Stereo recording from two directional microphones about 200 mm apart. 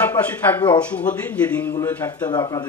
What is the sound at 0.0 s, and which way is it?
Speech, 10° left (ahead or behind).